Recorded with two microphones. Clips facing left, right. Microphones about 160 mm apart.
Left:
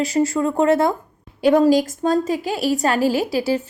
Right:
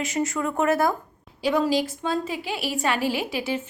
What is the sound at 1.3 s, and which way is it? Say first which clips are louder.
A woman's voice: left 8 dB; 50° left (ahead or behind).